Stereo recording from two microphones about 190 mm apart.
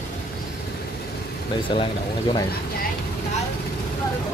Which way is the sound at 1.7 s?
25° left (ahead or behind).